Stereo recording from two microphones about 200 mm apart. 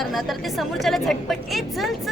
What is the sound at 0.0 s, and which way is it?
A woman's voice, centre (ahead or behind).